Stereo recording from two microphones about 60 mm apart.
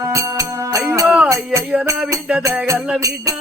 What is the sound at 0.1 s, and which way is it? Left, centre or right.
Music, right.